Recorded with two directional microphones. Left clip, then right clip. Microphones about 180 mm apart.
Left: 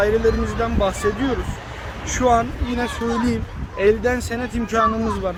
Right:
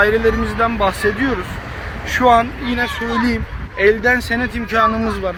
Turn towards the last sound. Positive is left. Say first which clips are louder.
# right 3 dB
turn(degrees=-20)  # may be behind; listen again after turning